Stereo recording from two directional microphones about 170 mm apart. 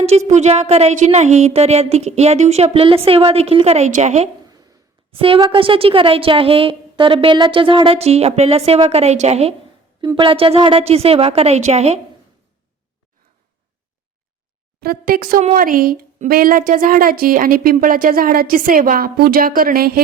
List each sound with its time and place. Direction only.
0.3 s a woman's voice: 40° right (ahead or behind)
5.1 s a woman's voice: 30° right (ahead or behind)
10.0 s a woman's voice: 25° right (ahead or behind)
14.8 s speech: 60° right (ahead or behind)
15.4 s a woman's voice: 50° right (ahead or behind)